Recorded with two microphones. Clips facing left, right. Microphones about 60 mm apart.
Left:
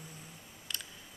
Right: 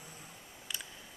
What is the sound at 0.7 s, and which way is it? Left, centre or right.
Camera, centre.